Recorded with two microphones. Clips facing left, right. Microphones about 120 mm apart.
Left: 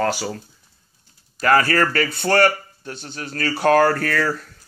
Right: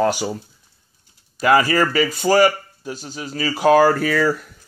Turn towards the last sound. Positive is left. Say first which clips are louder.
# right 3 dB
turn(degrees=-10)  # may be behind; listen again after turning